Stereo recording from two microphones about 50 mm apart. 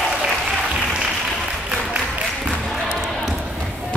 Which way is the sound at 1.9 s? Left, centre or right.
Right.